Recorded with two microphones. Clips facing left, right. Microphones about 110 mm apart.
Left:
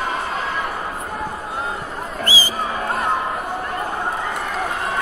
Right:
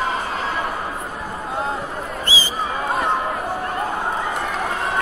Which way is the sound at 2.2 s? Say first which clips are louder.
Left 4 dB; 25° right (ahead or behind).